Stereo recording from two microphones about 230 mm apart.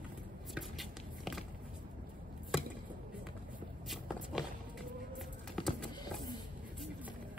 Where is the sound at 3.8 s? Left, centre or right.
Centre.